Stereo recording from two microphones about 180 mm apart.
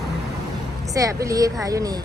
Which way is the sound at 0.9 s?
20° right (ahead or behind).